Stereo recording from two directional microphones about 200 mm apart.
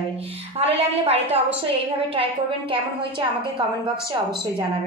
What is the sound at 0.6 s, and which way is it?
A woman's voice, 30° right (ahead or behind).